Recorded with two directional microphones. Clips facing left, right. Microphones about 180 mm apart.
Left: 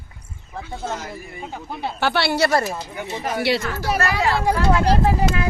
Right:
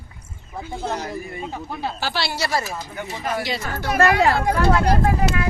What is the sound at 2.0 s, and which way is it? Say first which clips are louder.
Speech: left 9 dB; 60° left (ahead or behind).